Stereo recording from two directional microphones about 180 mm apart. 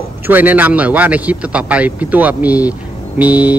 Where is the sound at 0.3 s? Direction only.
10° right (ahead or behind).